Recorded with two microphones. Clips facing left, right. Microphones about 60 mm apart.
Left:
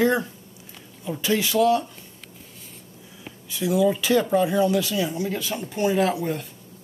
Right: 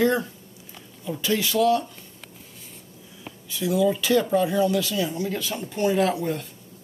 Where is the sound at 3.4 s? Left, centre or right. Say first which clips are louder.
Left 1 dB; centre.